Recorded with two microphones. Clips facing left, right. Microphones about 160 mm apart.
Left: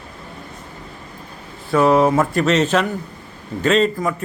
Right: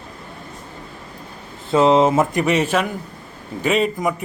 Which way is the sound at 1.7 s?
20° right (ahead or behind).